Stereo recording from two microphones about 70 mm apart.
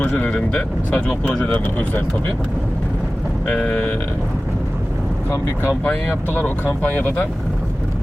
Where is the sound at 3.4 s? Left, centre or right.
Left.